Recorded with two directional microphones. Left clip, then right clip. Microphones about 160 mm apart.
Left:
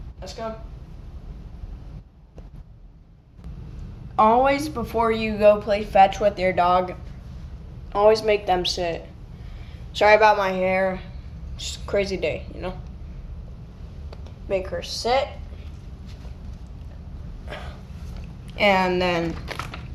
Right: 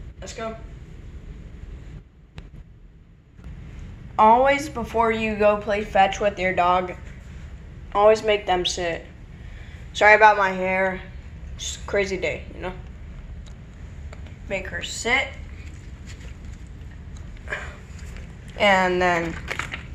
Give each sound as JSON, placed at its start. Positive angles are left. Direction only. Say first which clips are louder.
{"t": 4.1, "sound": "speech", "louder": "right 2 dB", "side_deg": 30}
{"t": 7.9, "sound": "speech", "louder": "right 1 dB", "side_deg": 15}
{"t": 14.4, "sound": "a woman's voice", "louder": "left 3 dB", "side_deg": 50}
{"t": 18.5, "sound": "speech", "louder": "right 1 dB", "side_deg": 15}